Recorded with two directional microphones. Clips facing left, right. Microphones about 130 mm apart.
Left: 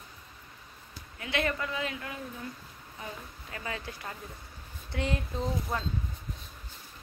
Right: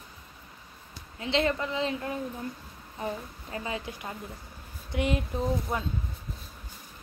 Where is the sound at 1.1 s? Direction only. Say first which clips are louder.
Right 4 dB; 25° right (ahead or behind).